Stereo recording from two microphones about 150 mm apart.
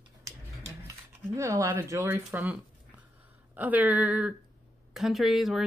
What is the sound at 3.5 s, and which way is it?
A woman's voice, 10° right (ahead or behind).